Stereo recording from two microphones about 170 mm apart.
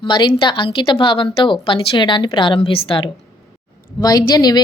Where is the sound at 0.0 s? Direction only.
30° left (ahead or behind).